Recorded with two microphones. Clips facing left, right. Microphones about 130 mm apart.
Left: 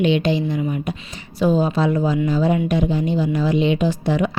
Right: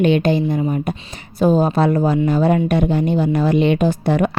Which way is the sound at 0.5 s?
40° right (ahead or behind).